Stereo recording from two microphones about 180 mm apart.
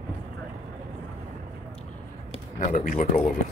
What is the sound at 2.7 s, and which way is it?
Speech, 45° left (ahead or behind).